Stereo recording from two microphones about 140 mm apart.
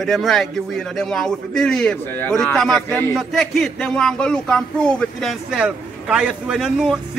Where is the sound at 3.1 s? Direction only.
Centre (ahead or behind).